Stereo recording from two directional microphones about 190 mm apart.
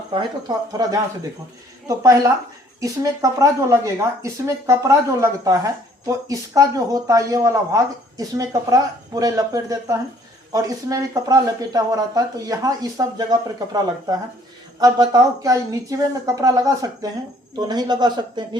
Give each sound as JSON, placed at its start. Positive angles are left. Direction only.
{"t": 0.1, "sound": "speech", "side_deg": -25}
{"t": 14.8, "sound": "speech", "side_deg": -20}